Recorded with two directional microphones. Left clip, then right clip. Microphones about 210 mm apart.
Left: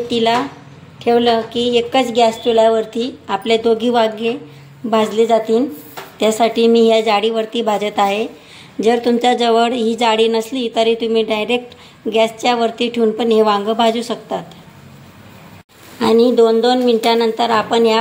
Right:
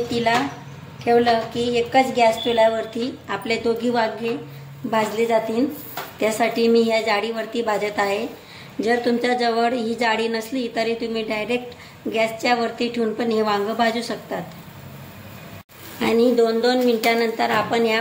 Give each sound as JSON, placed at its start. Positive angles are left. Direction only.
{"t": 1.0, "sound": "a woman's voice", "side_deg": 40}
{"t": 16.0, "sound": "speech", "side_deg": 30}